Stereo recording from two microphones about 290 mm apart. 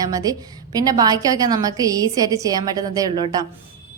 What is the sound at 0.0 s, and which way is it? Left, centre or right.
Speech, centre.